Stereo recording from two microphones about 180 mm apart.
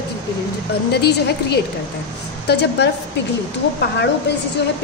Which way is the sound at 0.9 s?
65° left (ahead or behind).